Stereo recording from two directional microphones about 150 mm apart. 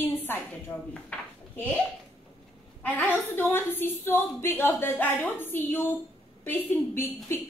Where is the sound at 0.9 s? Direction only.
10° left (ahead or behind).